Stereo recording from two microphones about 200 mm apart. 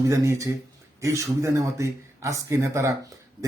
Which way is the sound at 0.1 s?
15° right (ahead or behind).